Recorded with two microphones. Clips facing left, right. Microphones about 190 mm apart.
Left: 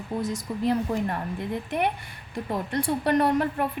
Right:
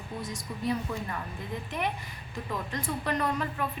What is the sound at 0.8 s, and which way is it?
A woman's voice, 60° left (ahead or behind).